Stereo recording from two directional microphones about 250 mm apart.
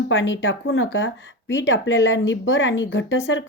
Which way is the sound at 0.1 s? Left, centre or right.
Left.